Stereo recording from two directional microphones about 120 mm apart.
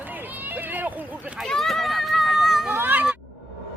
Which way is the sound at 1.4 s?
5° left (ahead or behind).